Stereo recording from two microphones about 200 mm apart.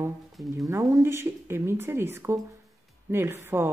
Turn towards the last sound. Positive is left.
turn(degrees=-15)  # may be behind; listen again after turning